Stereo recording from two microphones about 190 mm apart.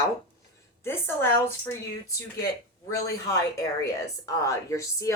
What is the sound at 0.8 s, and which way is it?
Speech, 10° left (ahead or behind).